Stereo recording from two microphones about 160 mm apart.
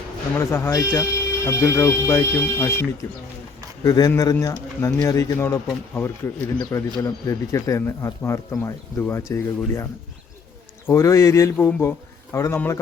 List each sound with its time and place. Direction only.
0.3 s speech: 15° left (ahead or behind)
3.8 s speech: 20° left (ahead or behind)
10.8 s speech: 20° left (ahead or behind)